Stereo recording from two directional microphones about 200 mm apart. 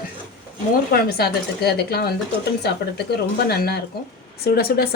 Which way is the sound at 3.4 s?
50° left (ahead or behind).